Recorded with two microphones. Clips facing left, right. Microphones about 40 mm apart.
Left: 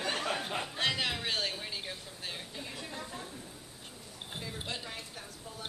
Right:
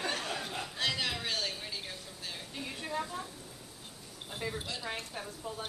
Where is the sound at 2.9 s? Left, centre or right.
Right.